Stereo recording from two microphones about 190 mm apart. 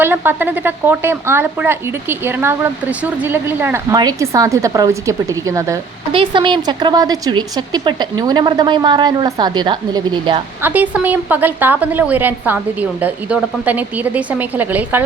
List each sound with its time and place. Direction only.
0.0 s a woman's voice: 10° right (ahead or behind)
10.6 s a woman's voice: 10° right (ahead or behind)